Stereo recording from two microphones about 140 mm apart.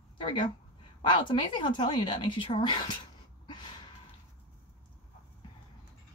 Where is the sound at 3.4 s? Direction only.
35° left (ahead or behind).